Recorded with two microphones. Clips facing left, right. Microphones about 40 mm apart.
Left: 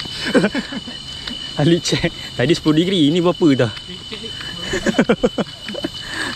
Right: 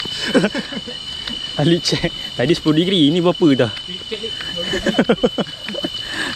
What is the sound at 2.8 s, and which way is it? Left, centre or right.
Speech, right.